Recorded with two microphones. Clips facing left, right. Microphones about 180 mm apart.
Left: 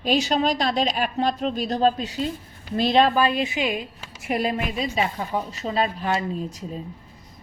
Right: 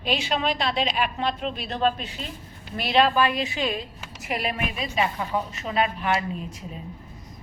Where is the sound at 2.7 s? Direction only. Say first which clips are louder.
Left 2 dB; 25° left (ahead or behind).